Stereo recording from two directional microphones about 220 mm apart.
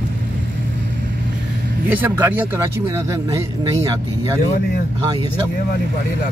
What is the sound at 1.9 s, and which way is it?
A man's voice, 10° right (ahead or behind).